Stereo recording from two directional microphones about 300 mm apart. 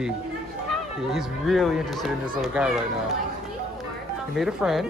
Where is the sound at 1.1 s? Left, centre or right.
Centre.